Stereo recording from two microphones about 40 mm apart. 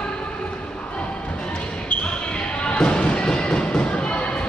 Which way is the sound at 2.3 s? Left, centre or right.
Left.